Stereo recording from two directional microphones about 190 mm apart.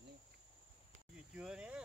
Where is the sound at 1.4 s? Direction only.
5° right (ahead or behind).